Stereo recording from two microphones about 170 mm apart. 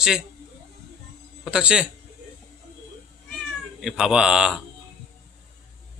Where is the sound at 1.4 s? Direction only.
5° right (ahead or behind).